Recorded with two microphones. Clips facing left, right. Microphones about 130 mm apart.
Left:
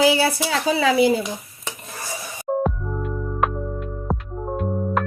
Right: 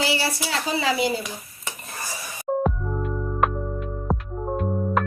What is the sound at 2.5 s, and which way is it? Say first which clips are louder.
Music: left 1 dB; centre (ahead or behind).